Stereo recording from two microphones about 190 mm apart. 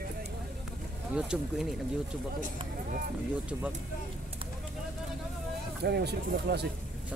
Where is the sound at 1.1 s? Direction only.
Centre (ahead or behind).